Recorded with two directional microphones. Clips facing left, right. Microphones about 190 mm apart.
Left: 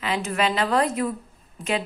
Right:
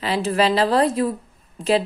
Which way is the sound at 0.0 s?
35° right (ahead or behind).